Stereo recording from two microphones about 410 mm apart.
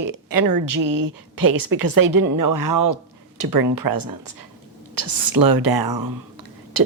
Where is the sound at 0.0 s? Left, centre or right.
Right.